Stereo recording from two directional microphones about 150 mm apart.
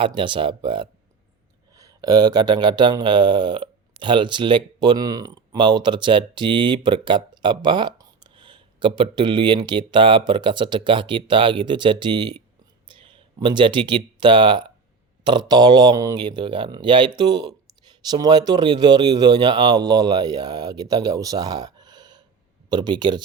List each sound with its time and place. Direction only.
0.0 s speech: 35° right (ahead or behind)